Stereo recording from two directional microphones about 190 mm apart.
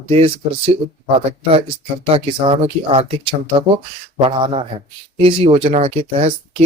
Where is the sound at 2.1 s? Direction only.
30° right (ahead or behind).